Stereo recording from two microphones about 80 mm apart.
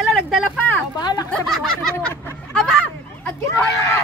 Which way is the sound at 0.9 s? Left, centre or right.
Left.